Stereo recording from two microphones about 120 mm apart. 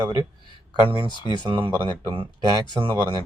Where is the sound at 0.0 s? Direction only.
35° right (ahead or behind).